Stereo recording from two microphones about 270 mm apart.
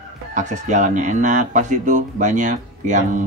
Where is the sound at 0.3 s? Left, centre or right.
Right.